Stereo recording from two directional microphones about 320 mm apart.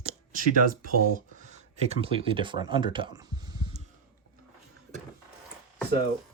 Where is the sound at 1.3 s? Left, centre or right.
Right.